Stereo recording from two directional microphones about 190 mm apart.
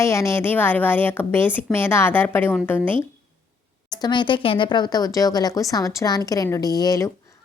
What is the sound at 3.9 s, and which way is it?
Speech, 25° left (ahead or behind).